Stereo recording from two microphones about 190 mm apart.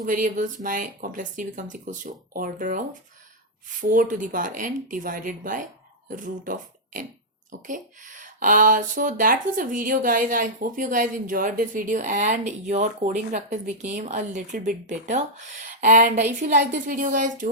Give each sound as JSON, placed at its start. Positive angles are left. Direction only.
{"t": 0.0, "sound": "speech", "side_deg": -45}